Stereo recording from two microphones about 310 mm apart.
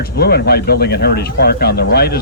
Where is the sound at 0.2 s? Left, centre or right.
Left.